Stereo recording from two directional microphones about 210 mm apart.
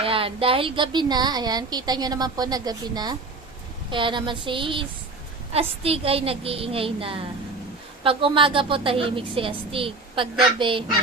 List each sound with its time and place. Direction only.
0.0 s a woman's voice: 25° right (ahead or behind)